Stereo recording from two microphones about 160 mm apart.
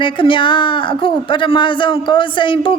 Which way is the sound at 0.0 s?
30° left (ahead or behind).